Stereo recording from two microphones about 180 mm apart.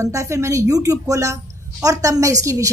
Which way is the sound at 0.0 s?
15° right (ahead or behind).